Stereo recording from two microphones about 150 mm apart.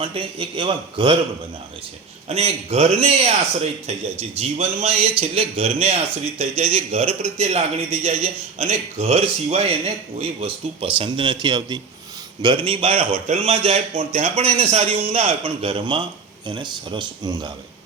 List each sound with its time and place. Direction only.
0.0 s speech: 35° right (ahead or behind)
2.3 s a man's voice: 45° right (ahead or behind)